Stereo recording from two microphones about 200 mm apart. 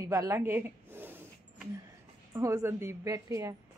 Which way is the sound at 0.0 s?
15° right (ahead or behind).